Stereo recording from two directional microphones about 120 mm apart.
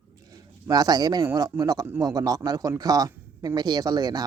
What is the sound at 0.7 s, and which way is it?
Speech, 35° right (ahead or behind).